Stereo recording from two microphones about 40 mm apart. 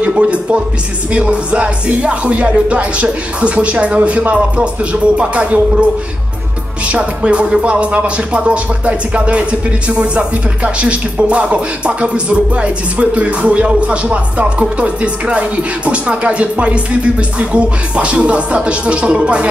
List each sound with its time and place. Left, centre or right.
0.0 s speech: right
6.9 s music: right
7.6 s speech: right